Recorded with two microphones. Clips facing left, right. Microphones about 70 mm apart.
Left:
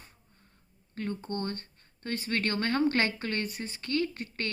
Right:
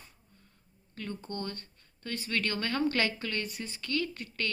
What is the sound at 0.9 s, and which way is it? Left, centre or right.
A woman's voice, left.